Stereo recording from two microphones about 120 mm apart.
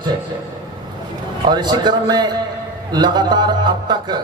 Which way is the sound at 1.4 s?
35° right (ahead or behind).